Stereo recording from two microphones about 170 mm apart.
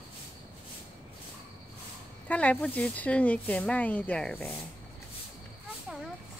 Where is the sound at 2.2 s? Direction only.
10° left (ahead or behind).